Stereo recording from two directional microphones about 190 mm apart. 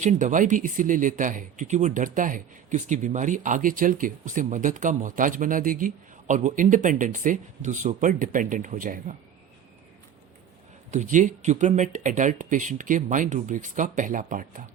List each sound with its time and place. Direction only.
0.0 s speech: 40° right (ahead or behind)
10.9 s speech: 40° right (ahead or behind)